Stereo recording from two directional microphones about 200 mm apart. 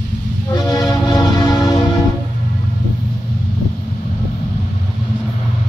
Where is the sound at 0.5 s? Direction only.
20° left (ahead or behind).